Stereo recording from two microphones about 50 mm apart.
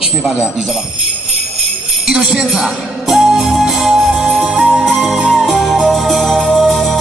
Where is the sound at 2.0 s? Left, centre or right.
Centre.